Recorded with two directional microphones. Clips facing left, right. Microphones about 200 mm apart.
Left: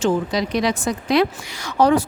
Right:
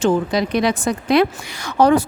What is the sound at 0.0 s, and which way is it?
Speech, 55° right (ahead or behind).